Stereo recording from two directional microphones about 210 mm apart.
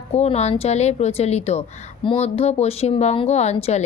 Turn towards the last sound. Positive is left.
turn(degrees=30)  # may be behind; listen again after turning